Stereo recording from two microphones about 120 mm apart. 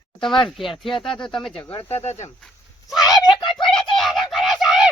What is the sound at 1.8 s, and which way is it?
Speech, 60° left (ahead or behind).